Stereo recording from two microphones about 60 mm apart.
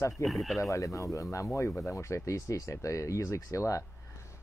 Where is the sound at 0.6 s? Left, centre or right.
Left.